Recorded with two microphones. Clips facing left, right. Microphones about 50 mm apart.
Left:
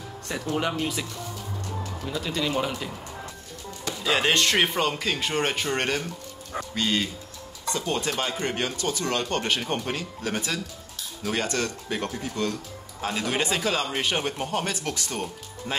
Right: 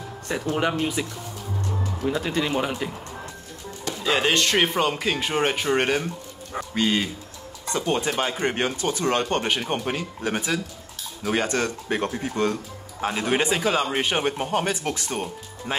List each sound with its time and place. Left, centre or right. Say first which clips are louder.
0.6 s speech: right 3 dB; centre
2.0 s speech: right 4 dB; right
4.0 s speech: right 1 dB; centre; by 15.2 s right